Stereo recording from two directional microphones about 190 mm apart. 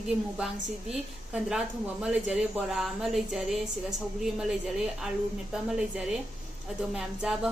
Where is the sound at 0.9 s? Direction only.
5° right (ahead or behind).